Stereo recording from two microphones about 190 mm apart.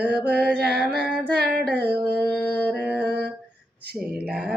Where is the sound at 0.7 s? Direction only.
5° right (ahead or behind).